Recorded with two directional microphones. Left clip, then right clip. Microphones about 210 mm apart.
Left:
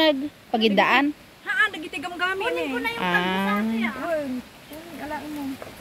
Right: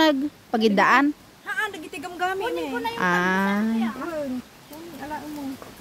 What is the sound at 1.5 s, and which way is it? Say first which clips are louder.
A woman's voice: left 5 dB; 55° right (ahead or behind).